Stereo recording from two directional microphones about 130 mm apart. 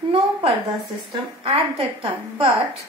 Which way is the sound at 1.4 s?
50° right (ahead or behind).